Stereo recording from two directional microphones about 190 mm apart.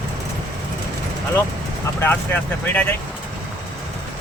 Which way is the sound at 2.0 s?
10° left (ahead or behind).